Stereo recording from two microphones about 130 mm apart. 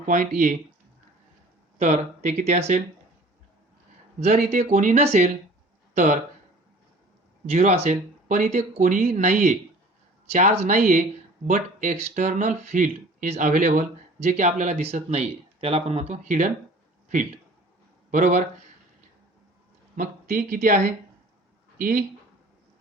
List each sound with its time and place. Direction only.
0.0 s speech: 75° right (ahead or behind)
1.8 s speech: 65° right (ahead or behind)
4.2 s speech: 60° right (ahead or behind)
7.4 s speech: 55° right (ahead or behind)
18.1 s speech: 80° right
20.0 s speech: 90° right; by 20.9 s 70° right (ahead or behind)
21.8 s speech: 90° right